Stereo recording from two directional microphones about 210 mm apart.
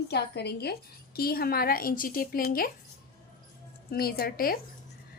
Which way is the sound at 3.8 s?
45° left (ahead or behind).